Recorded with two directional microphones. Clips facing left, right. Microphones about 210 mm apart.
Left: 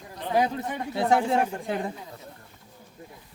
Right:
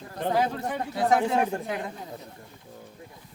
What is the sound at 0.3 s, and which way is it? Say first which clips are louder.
Speech: left 3 dB; 15° left (ahead or behind).